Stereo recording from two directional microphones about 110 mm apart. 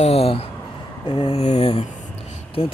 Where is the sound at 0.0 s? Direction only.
65° left (ahead or behind).